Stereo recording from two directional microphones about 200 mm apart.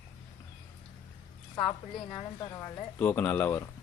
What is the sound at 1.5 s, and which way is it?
Speech, 25° left (ahead or behind).